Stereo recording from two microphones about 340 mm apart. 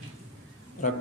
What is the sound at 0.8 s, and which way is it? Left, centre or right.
Speech, left.